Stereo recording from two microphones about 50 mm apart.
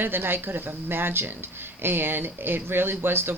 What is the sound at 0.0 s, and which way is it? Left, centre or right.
Speech, right.